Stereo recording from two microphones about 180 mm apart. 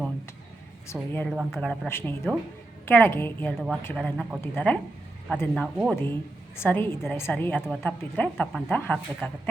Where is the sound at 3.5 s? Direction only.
5° right (ahead or behind).